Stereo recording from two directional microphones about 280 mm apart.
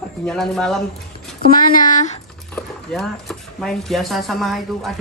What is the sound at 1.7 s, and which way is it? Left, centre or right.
Speech, left.